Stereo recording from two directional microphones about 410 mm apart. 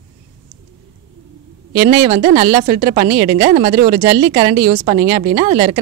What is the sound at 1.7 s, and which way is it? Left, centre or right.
Speech, right.